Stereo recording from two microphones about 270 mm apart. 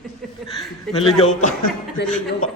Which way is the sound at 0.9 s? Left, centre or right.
Left.